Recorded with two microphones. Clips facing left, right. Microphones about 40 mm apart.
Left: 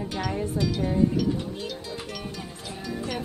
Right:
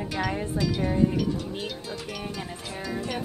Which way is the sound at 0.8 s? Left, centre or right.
Right.